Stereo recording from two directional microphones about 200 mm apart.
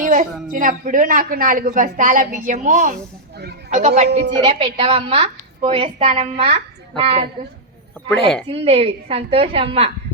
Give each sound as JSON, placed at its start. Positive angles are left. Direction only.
{"t": 0.0, "sound": "a sound", "side_deg": -40}
{"t": 0.5, "sound": "a woman's voice", "side_deg": -40}
{"t": 8.0, "sound": "a woman's voice", "side_deg": 5}
{"t": 8.4, "sound": "a woman's voice", "side_deg": -30}